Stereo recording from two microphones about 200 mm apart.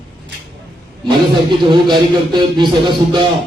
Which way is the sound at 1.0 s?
25° right (ahead or behind).